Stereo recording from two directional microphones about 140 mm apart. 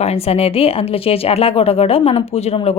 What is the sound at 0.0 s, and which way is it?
Speech, 45° left (ahead or behind).